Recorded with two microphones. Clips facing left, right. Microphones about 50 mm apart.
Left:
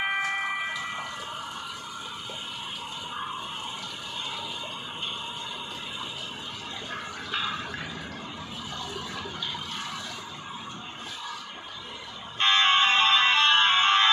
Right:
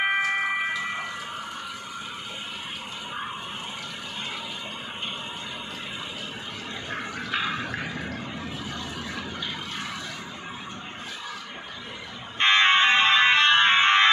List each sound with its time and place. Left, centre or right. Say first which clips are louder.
0.0 s music: right 4 dB; right
6.9 s a sound: right 4 dB; right
12.4 s music: right 3 dB; right